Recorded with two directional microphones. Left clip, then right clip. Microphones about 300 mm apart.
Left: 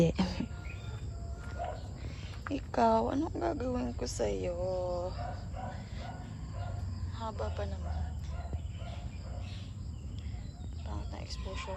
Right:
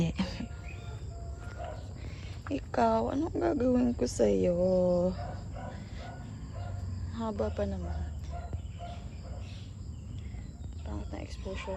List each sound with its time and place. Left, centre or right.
0.0 s speech: left
2.5 s speech: centre
7.1 s speech: centre
10.8 s wild animals: centre